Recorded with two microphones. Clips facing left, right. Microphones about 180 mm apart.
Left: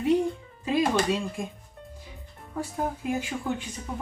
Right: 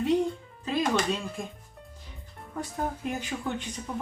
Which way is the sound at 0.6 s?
10° left (ahead or behind).